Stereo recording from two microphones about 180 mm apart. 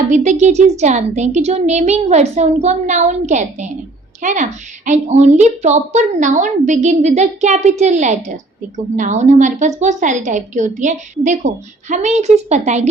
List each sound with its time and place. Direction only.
0.1 s a woman's voice: 40° right (ahead or behind)